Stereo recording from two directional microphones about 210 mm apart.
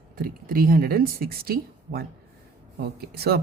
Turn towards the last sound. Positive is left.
turn(degrees=-50)  # may be behind; listen again after turning